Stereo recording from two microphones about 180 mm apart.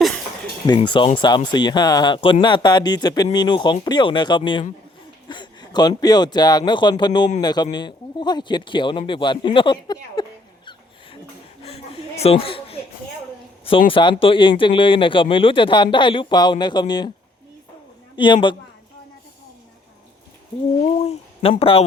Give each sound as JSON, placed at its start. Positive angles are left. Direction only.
{"t": 0.7, "sound": "speech", "side_deg": 25}
{"t": 11.6, "sound": "a sound", "side_deg": 35}
{"t": 13.9, "sound": "speech", "side_deg": 25}
{"t": 18.2, "sound": "speech", "side_deg": 25}
{"t": 21.0, "sound": "a man's voice", "side_deg": 35}